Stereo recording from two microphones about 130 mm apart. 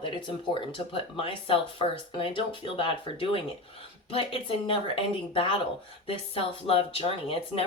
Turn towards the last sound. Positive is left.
turn(degrees=45)  # may be behind; listen again after turning